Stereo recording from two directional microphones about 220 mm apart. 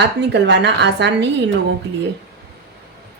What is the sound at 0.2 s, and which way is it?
A woman's voice, 50° right (ahead or behind).